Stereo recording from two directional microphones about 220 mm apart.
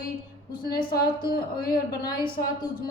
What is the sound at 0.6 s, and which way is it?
A woman's voice, 45° left (ahead or behind).